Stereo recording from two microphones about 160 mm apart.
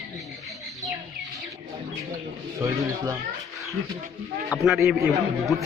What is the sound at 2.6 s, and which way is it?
Speech, 20° right (ahead or behind).